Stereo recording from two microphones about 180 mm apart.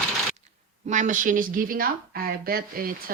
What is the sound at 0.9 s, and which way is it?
Speech, 45° right (ahead or behind).